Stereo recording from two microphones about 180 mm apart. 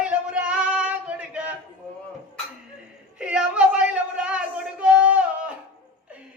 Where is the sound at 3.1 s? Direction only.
5° right (ahead or behind).